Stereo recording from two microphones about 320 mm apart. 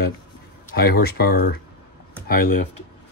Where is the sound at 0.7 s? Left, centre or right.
Left.